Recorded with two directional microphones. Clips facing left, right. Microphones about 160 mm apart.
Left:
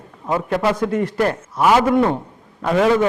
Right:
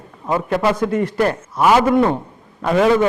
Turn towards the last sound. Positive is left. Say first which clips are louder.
# right 1 dB
turn(degrees=-20)  # may be behind; listen again after turning